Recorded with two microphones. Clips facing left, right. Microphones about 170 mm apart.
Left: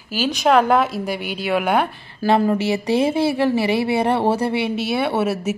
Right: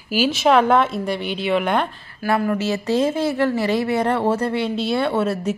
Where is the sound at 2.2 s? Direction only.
20° left (ahead or behind).